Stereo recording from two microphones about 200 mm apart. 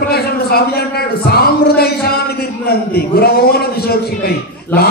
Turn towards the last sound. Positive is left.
turn(degrees=10)  # may be behind; listen again after turning